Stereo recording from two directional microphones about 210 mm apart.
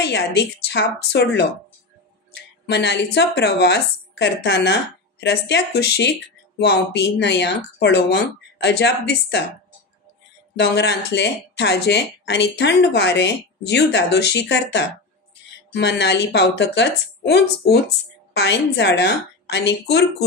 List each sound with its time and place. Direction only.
0.0 s speech: 50° left (ahead or behind)
2.6 s speech: 50° left (ahead or behind)
10.5 s speech: 55° left (ahead or behind)